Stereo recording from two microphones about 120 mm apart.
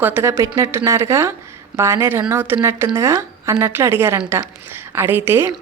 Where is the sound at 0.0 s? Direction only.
20° right (ahead or behind).